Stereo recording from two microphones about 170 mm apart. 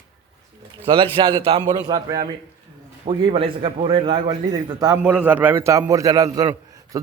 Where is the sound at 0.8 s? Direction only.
30° right (ahead or behind).